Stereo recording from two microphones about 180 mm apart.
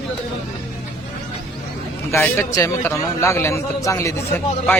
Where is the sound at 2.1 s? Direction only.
15° left (ahead or behind).